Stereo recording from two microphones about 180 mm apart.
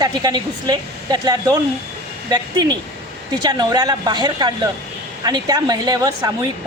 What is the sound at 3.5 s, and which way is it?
Speech, 20° right (ahead or behind).